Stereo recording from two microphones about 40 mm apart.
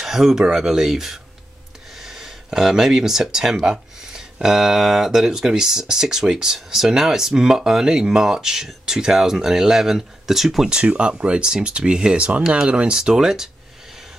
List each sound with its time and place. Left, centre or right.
0.0 s speech: centre
10.7 s speech: right; by 13.5 s centre